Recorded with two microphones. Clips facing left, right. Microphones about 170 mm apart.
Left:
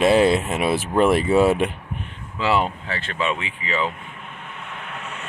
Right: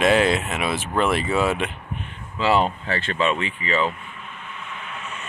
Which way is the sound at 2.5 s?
25° right (ahead or behind).